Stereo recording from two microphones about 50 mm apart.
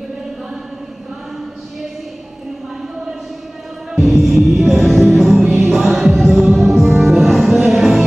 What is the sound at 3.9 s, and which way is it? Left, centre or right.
Music, centre.